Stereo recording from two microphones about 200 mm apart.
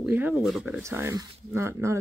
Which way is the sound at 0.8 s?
15° right (ahead or behind).